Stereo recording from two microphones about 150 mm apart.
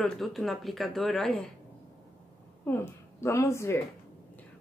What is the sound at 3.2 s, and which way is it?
Speech, 20° left (ahead or behind).